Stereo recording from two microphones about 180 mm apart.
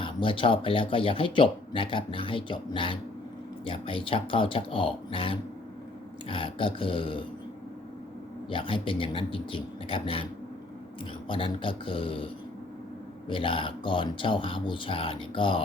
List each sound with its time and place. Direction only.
0.0 s speech: 30° left (ahead or behind)
8.4 s speech: 30° left (ahead or behind)
11.3 s speech: 30° left (ahead or behind)